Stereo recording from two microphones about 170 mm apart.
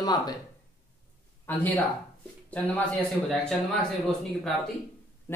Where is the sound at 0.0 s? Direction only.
25° left (ahead or behind).